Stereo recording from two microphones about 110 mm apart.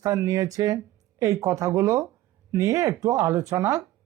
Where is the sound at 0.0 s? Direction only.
30° right (ahead or behind).